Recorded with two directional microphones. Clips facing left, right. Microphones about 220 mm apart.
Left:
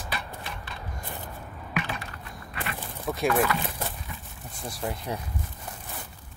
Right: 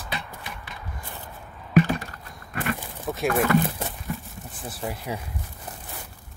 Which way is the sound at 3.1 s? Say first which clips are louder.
Right 1 dB; 5° right (ahead or behind).